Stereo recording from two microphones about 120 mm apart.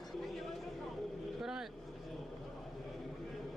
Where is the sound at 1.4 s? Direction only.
5° right (ahead or behind).